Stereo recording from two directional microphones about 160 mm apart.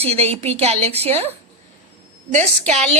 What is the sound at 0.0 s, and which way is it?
A woman's voice, 40° right (ahead or behind).